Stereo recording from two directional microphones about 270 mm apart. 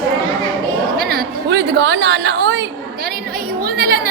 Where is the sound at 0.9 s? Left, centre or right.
Right.